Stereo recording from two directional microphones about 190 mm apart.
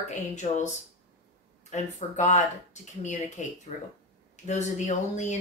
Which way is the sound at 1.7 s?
40° left (ahead or behind).